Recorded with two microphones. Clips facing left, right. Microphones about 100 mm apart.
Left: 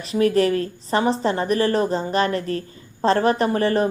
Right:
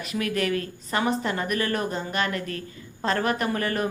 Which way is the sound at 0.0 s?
30° left (ahead or behind).